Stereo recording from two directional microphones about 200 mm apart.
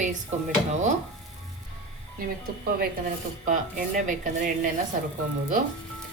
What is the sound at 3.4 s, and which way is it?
A woman's voice, 40° right (ahead or behind).